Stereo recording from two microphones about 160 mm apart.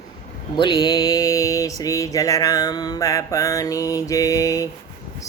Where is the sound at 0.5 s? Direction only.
25° left (ahead or behind).